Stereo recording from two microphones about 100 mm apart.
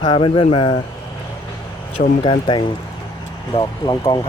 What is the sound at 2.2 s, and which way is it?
Speech, 55° left (ahead or behind).